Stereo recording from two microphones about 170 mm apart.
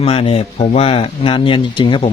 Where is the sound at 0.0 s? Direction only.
35° left (ahead or behind).